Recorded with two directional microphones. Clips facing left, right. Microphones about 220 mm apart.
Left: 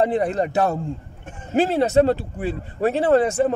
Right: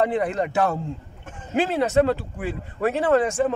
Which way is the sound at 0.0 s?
35° left (ahead or behind).